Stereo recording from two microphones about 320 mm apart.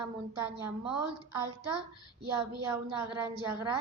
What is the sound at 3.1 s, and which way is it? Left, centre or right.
Speech, centre.